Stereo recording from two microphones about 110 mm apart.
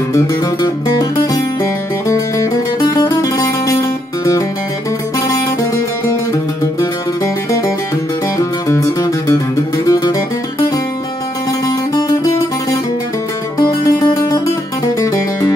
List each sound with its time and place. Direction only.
0.1 s music: 30° left (ahead or behind)
8.4 s music: 30° left (ahead or behind)
11.6 s music: 35° left (ahead or behind)
13.6 s music: 35° left (ahead or behind)